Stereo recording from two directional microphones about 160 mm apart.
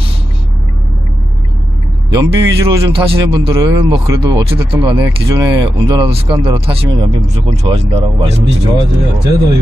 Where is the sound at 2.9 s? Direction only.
35° right (ahead or behind).